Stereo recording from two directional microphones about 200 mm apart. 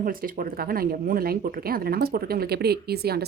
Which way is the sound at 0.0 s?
45° right (ahead or behind).